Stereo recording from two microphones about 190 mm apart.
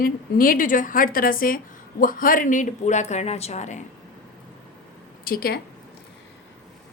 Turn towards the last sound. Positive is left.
turn(degrees=50)  # may be behind; listen again after turning